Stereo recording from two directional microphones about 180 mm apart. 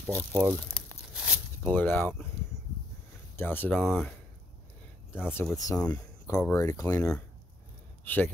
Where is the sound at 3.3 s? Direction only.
10° left (ahead or behind).